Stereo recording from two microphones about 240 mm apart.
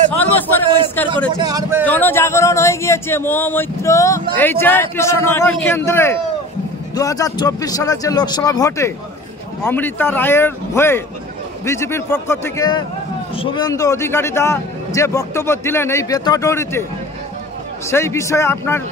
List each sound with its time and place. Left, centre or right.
0.4 s a sound: centre
1.3 s a man's voice: centre
1.9 s speech: centre
17.8 s speech: centre